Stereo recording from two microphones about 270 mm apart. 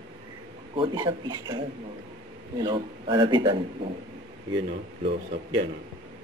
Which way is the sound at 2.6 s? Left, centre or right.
Centre.